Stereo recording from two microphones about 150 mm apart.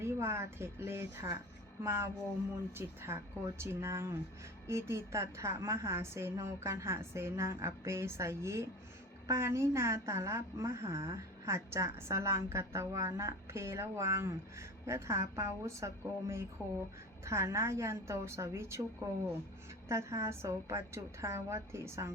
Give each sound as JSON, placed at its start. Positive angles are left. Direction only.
{"t": 0.0, "sound": "a woman's voice", "side_deg": -15}
{"t": 16.6, "sound": "speech", "side_deg": 5}
{"t": 17.2, "sound": "a woman's voice", "side_deg": -20}